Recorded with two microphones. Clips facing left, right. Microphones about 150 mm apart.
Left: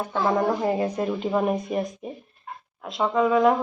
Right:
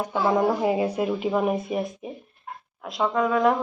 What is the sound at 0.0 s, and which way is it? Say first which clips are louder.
Speech: right 1 dB; 10° right (ahead or behind).